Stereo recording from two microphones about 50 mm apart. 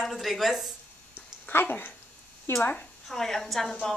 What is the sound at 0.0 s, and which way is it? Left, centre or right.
Speech, centre.